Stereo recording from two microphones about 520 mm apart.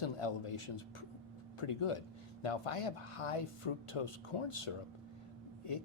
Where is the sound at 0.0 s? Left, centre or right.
Left.